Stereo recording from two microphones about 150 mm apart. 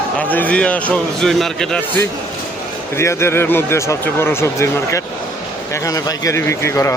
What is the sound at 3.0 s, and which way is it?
A man's voice, 15° left (ahead or behind).